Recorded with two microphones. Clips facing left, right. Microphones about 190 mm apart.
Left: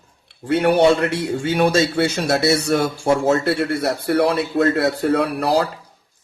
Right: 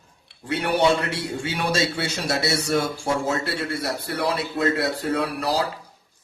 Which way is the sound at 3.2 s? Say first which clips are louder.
Left 8 dB; 55° left (ahead or behind).